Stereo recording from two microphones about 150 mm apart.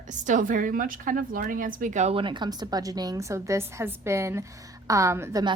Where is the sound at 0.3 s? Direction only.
60° right (ahead or behind).